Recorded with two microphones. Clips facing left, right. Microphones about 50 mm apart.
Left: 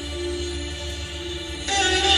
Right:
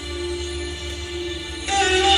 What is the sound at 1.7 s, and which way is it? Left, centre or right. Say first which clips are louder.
Music: right 3 dB; right.